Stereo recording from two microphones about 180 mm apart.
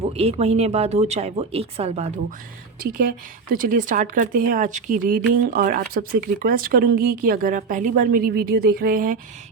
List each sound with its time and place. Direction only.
0.1 s speech: 35° right (ahead or behind)
3.5 s speech: 50° right (ahead or behind)